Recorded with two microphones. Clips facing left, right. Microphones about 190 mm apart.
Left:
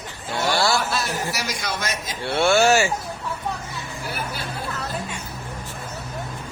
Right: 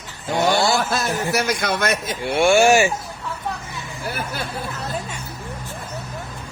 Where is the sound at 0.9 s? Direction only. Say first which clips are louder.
Right 5 dB; 55° right (ahead or behind).